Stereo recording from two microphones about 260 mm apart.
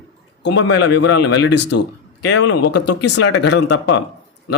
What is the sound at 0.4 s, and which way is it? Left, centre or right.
Speech, left.